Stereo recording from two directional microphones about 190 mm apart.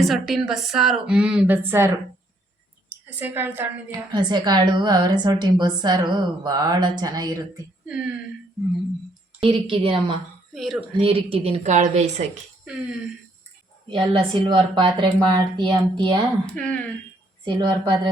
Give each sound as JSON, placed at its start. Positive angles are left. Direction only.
{"t": 0.0, "sound": "speech", "side_deg": 0}
{"t": 3.2, "sound": "a woman's voice", "side_deg": -10}
{"t": 4.1, "sound": "a woman's voice", "side_deg": -25}
{"t": 7.9, "sound": "speech", "side_deg": -5}
{"t": 9.4, "sound": "a woman's voice", "side_deg": -30}
{"t": 10.5, "sound": "speech", "side_deg": 0}
{"t": 10.8, "sound": "speech", "side_deg": -30}
{"t": 12.6, "sound": "speech", "side_deg": -5}
{"t": 13.8, "sound": "a woman's voice", "side_deg": -25}
{"t": 16.5, "sound": "speech", "side_deg": 5}
{"t": 17.4, "sound": "a woman's voice", "side_deg": -25}